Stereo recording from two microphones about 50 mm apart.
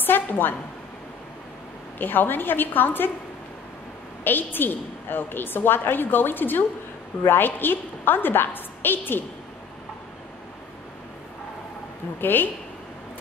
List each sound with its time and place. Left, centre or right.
0.0 s a woman's voice: left
2.0 s a woman's voice: left
4.2 s a woman's voice: left
12.2 s a woman's voice: left